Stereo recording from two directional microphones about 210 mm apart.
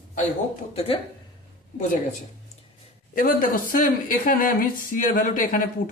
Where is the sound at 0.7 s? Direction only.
30° left (ahead or behind).